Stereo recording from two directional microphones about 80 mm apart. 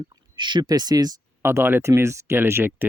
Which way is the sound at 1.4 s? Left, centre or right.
Right.